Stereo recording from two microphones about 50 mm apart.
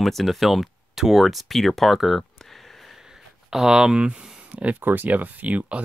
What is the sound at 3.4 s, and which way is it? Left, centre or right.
Speech, centre.